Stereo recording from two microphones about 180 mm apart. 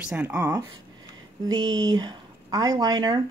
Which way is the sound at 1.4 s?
20° right (ahead or behind).